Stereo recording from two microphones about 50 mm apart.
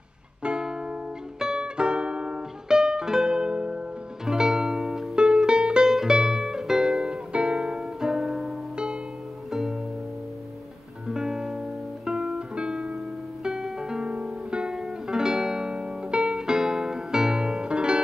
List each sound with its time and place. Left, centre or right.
0.4 s music: centre
8.7 s music: centre
9.5 s music: centre
11.1 s music: centre